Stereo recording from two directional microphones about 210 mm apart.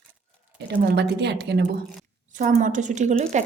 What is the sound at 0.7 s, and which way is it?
Speech, 55° right (ahead or behind).